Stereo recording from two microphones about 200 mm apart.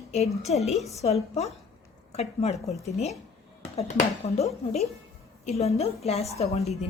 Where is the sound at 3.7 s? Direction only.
30° left (ahead or behind).